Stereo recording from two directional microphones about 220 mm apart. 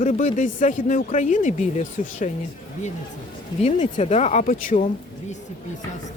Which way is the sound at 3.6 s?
30° left (ahead or behind).